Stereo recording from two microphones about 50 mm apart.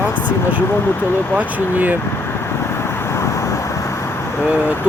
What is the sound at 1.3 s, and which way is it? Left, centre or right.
Speech, right.